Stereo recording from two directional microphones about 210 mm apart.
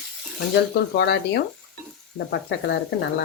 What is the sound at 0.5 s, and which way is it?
Speech, 50° left (ahead or behind).